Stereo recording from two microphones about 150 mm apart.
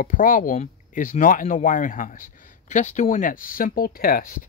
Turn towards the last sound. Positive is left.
turn(degrees=75)  # may be behind; listen again after turning